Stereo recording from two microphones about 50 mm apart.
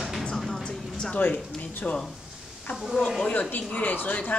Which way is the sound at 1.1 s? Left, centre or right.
Left.